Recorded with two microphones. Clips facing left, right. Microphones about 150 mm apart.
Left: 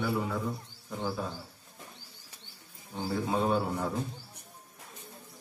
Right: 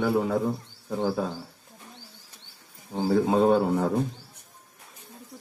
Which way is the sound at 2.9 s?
60° right (ahead or behind).